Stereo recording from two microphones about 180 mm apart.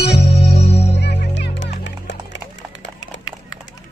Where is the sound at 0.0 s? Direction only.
65° left (ahead or behind).